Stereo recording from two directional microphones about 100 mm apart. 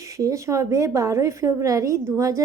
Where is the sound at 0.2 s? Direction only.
35° right (ahead or behind).